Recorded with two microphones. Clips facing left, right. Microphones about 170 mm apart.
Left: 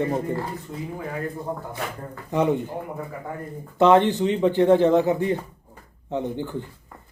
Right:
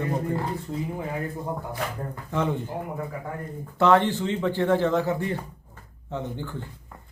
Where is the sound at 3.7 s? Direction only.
20° left (ahead or behind).